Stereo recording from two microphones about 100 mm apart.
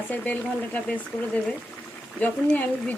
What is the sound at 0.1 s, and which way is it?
Speech, 15° left (ahead or behind).